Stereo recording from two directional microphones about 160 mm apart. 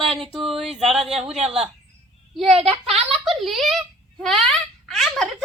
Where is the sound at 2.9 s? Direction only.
40° right (ahead or behind).